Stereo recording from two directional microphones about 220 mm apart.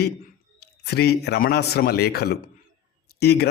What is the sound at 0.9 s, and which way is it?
Speech, 50° left (ahead or behind).